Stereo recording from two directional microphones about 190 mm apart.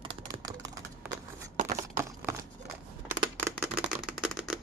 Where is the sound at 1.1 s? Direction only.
40° right (ahead or behind).